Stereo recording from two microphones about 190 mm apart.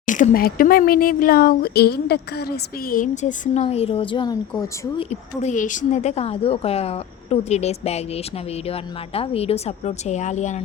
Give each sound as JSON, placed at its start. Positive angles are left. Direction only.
{"t": 0.0, "sound": "speech", "side_deg": 45}
{"t": 5.4, "sound": "speech", "side_deg": 40}